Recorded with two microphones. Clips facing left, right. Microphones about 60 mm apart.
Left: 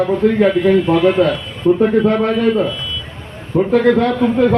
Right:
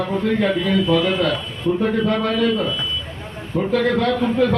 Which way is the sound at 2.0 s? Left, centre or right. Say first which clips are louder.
Left 5 dB; left.